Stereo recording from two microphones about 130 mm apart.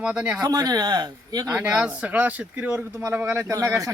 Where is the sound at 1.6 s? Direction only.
10° right (ahead or behind).